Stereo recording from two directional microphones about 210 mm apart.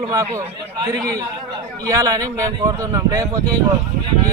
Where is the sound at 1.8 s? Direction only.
15° right (ahead or behind).